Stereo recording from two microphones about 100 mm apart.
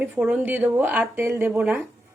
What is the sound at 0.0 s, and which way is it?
A woman's voice, 15° right (ahead or behind).